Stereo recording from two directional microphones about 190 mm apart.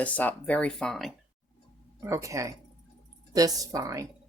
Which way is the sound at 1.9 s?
15° right (ahead or behind).